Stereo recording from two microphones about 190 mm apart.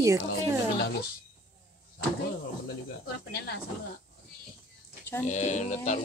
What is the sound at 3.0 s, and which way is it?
Speech, 60° left (ahead or behind).